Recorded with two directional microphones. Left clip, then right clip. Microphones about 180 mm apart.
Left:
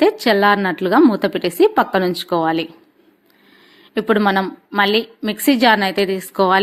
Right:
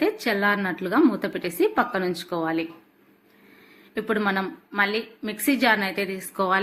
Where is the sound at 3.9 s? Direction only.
45° left (ahead or behind).